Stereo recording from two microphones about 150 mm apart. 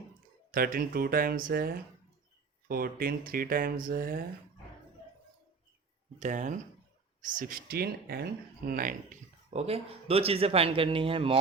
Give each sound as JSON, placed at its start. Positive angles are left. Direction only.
{"t": 0.5, "sound": "speech", "side_deg": -75}
{"t": 6.1, "sound": "speech", "side_deg": -55}
{"t": 7.2, "sound": "speech", "side_deg": -65}